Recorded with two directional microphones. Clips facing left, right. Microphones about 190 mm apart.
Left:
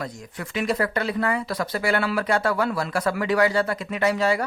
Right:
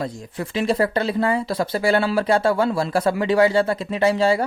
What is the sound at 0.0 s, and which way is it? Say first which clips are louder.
Speech: right 5 dB; 30° right (ahead or behind).